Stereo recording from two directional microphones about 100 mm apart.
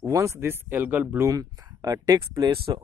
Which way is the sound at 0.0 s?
35° right (ahead or behind).